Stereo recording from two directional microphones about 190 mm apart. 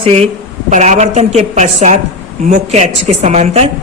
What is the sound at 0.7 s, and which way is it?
Speech, 40° right (ahead or behind).